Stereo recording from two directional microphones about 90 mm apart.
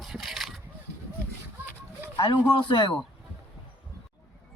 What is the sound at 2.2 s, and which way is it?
Speech, 65° left (ahead or behind).